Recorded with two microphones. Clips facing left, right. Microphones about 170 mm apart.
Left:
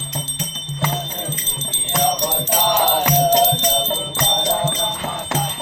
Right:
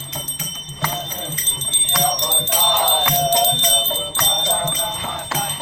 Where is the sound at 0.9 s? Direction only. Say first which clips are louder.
Left 2 dB; 35° left (ahead or behind).